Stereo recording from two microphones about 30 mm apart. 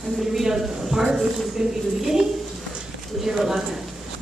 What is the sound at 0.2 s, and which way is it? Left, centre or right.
Speech, centre.